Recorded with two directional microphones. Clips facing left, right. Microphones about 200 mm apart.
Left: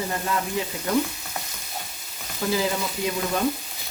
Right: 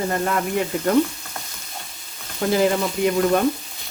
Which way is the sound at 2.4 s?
60° right (ahead or behind).